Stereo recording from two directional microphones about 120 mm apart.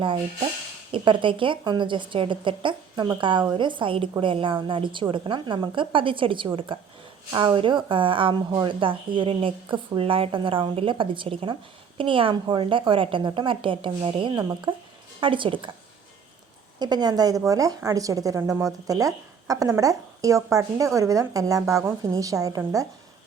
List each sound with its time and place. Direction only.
0.9 s a woman's voice: 45° right (ahead or behind)
16.8 s a woman's voice: 35° right (ahead or behind)